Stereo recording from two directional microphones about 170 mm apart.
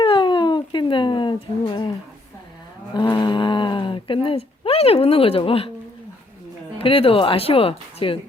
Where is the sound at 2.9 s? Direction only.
25° left (ahead or behind).